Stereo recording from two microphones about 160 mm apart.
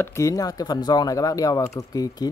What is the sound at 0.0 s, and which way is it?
Speech, 20° left (ahead or behind).